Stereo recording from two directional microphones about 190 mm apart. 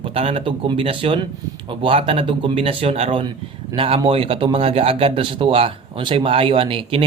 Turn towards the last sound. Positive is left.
turn(degrees=-25)  # may be behind; listen again after turning